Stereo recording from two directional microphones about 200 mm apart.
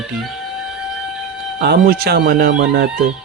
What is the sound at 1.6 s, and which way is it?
Speech, 50° right (ahead or behind).